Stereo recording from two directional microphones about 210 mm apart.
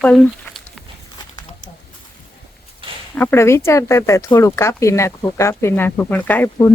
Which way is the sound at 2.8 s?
25° right (ahead or behind).